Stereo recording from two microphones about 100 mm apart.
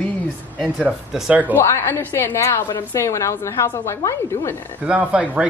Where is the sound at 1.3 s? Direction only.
15° right (ahead or behind).